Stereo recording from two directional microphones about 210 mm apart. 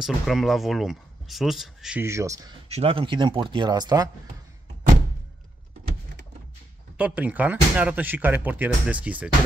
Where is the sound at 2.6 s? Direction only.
30° right (ahead or behind).